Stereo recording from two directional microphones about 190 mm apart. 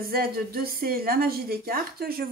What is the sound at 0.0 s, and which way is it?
A woman's voice, 50° right (ahead or behind).